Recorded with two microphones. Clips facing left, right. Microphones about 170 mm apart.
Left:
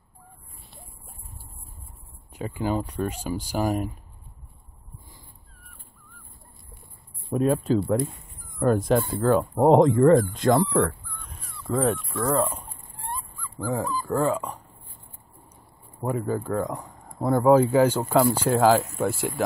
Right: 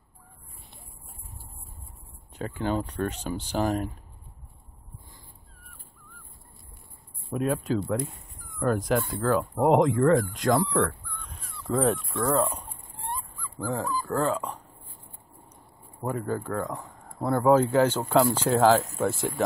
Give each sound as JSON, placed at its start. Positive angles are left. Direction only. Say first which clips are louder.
{"t": 2.3, "sound": "speech", "louder": "left 1 dB", "side_deg": 10}
{"t": 7.2, "sound": "speech", "louder": "left 5 dB", "side_deg": 30}
{"t": 8.7, "sound": "speech", "louder": "left 4 dB", "side_deg": 25}
{"t": 10.9, "sound": "dog", "louder": "left 1 dB", "side_deg": 0}
{"t": 13.6, "sound": "speech", "louder": "left 2 dB", "side_deg": 10}
{"t": 16.0, "sound": "speech", "louder": "left 3 dB", "side_deg": 10}